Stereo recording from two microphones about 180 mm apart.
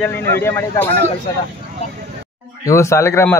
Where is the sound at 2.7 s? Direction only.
15° left (ahead or behind).